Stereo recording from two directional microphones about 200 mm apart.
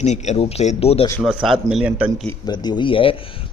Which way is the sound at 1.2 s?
Centre (ahead or behind).